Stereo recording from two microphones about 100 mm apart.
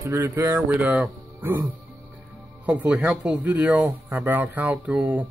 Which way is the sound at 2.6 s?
10° right (ahead or behind).